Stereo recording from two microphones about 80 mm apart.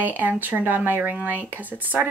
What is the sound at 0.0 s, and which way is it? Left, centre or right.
Speech, right.